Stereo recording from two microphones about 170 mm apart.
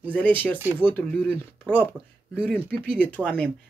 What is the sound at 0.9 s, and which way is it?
Speech, 10° left (ahead or behind).